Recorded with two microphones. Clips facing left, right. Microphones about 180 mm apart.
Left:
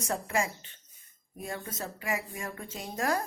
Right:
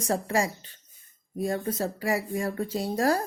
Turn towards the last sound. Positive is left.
turn(degrees=-35)  # may be behind; listen again after turning